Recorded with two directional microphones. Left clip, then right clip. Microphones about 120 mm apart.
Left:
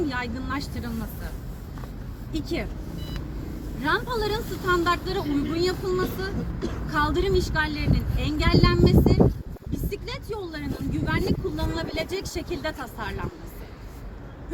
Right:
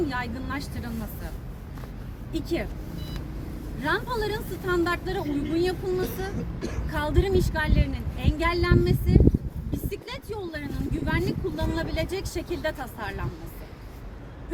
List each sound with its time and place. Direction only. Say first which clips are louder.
0.0 s speech: left 1 dB; 15° right (ahead or behind)
2.3 s speech: right 1 dB; 15° right (ahead or behind)
3.8 s speech: left 2 dB; 15° right (ahead or behind)